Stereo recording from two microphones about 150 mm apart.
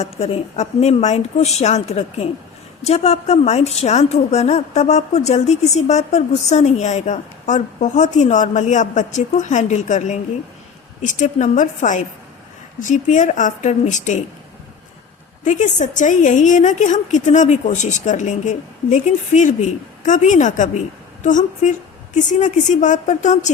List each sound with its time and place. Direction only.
0.0 s a woman's voice: 45° left (ahead or behind)
15.4 s a woman's voice: 55° left (ahead or behind)